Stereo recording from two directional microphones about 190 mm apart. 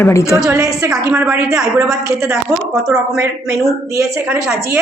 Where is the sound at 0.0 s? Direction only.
15° left (ahead or behind).